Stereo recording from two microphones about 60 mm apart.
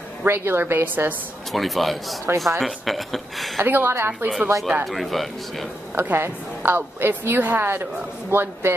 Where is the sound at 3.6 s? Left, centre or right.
Right.